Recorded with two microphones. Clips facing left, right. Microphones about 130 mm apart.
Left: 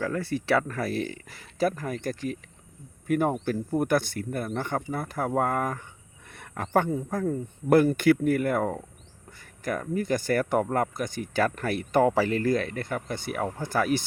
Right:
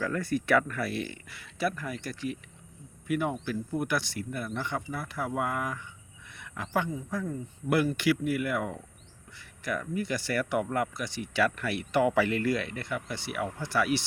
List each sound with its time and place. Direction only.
0.0 s speech: 25° left (ahead or behind); by 14.0 s 45° left (ahead or behind)